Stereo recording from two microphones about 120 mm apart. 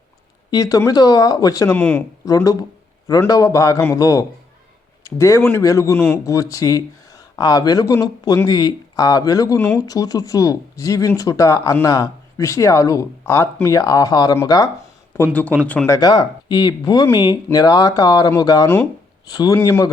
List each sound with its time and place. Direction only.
0.5 s speech: 30° left (ahead or behind)
1.7 s speech: 15° left (ahead or behind)
2.2 s speech: 30° left (ahead or behind)
9.6 s speech: 15° left (ahead or behind)
9.8 s speech: 30° left (ahead or behind)
15.1 s speech: 15° left (ahead or behind)
15.9 s speech: 30° left (ahead or behind)